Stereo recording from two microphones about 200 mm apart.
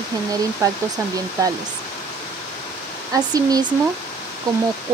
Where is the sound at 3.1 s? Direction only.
20° right (ahead or behind).